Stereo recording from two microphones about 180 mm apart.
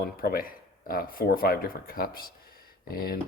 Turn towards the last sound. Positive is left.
turn(degrees=55)  # may be behind; listen again after turning